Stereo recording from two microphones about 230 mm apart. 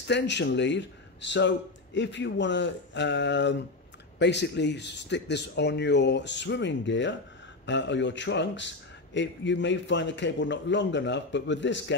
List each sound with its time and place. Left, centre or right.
0.1 s a man's voice: left